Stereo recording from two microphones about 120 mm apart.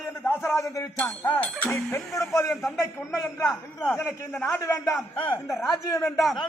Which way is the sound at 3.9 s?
15° left (ahead or behind).